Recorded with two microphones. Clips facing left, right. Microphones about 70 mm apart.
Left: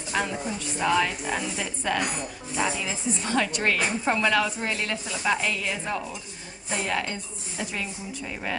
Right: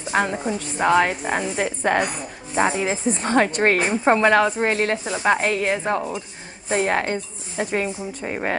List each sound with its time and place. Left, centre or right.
0.1 s a woman's voice: right